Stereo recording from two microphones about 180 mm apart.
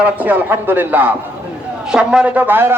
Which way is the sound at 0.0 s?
10° right (ahead or behind).